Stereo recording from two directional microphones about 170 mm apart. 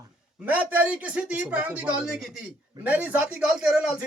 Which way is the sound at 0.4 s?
10° right (ahead or behind).